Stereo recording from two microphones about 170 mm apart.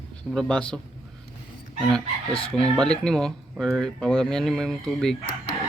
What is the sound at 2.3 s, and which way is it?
Speech, 35° left (ahead or behind).